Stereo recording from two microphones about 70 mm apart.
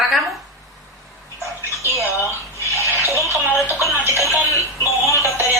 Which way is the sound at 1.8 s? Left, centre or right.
Left.